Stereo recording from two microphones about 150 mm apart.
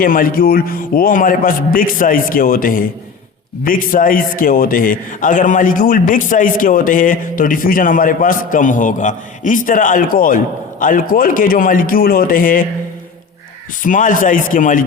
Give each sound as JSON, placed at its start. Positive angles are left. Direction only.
{"t": 0.0, "sound": "a man's voice", "side_deg": 70}
{"t": 13.8, "sound": "a man's voice", "side_deg": 60}